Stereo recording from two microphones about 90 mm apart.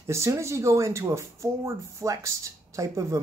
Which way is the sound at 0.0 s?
30° right (ahead or behind).